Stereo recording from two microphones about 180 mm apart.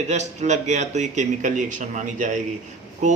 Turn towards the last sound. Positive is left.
turn(degrees=-40)  # may be behind; listen again after turning